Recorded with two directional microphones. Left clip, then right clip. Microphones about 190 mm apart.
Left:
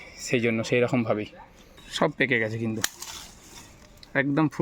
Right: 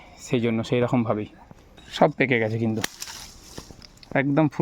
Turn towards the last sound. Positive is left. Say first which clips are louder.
# right 2 dB
turn(degrees=-40)  # may be behind; listen again after turning